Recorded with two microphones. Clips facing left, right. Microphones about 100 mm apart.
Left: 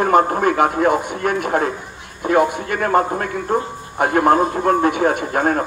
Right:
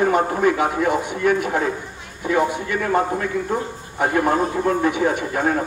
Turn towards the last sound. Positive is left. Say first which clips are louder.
# left 2 dB
turn(degrees=50)  # may be behind; listen again after turning